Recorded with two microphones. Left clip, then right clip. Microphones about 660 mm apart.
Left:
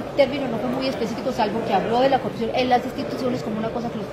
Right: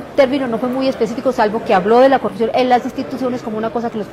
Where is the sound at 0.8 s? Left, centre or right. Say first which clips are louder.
Right 8 dB; right.